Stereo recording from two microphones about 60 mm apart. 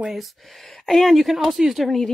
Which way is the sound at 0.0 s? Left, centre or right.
Centre.